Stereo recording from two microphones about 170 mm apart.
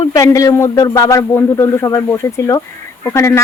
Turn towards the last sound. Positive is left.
turn(degrees=15)  # may be behind; listen again after turning